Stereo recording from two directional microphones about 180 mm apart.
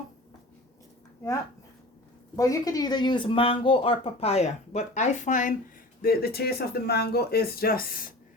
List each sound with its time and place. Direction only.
2.3 s speech: 20° left (ahead or behind); by 5.5 s 45° left (ahead or behind)
6.0 s speech: 55° left (ahead or behind)